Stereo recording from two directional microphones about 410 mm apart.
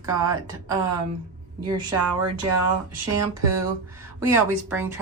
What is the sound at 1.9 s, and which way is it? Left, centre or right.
Speech, right.